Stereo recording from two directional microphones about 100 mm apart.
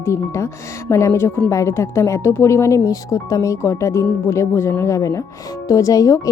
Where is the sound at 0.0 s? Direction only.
30° left (ahead or behind).